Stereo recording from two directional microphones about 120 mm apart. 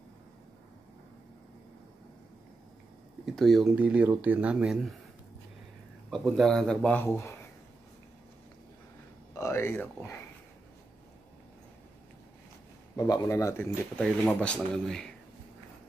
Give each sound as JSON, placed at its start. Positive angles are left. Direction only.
{"t": 3.3, "sound": "a man's voice", "side_deg": 0}
{"t": 3.7, "sound": "speech", "side_deg": -10}
{"t": 6.0, "sound": "a man's voice", "side_deg": 0}
{"t": 9.4, "sound": "speech", "side_deg": 20}
{"t": 12.9, "sound": "speech", "side_deg": 30}
{"t": 13.9, "sound": "speech", "side_deg": 10}